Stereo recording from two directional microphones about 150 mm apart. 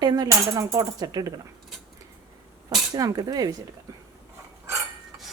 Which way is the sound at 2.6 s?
25° right (ahead or behind).